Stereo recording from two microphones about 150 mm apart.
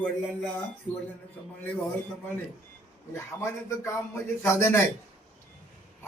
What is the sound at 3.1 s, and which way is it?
A man's voice, 20° left (ahead or behind).